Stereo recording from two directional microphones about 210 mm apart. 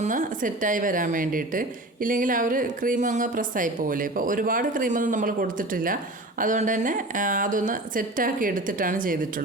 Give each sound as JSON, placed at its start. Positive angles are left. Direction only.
{"t": 0.0, "sound": "a woman's voice", "side_deg": -40}